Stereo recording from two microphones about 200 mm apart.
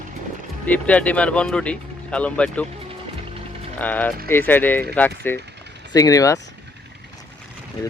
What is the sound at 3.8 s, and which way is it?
Speech, 10° left (ahead or behind).